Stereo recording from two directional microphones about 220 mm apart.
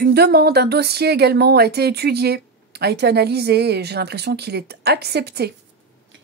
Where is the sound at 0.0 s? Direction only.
50° right (ahead or behind).